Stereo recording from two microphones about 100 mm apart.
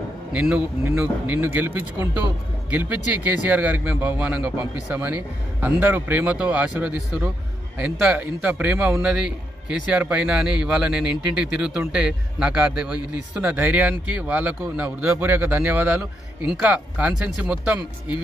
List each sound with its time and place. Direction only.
0.3 s speech: 15° right (ahead or behind)